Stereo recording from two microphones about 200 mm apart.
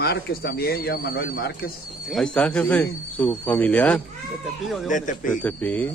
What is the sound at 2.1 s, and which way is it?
A man's voice, 5° left (ahead or behind).